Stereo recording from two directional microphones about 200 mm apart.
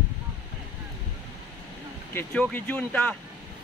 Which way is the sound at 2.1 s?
10° left (ahead or behind).